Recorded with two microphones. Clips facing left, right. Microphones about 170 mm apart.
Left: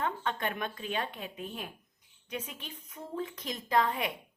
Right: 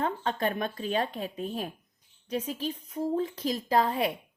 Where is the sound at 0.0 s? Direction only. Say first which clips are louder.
Right 4 dB; 35° right (ahead or behind).